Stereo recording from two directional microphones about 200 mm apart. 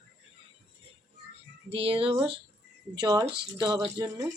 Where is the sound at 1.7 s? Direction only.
30° right (ahead or behind).